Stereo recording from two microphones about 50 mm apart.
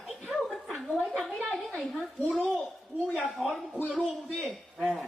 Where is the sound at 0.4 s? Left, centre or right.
Centre.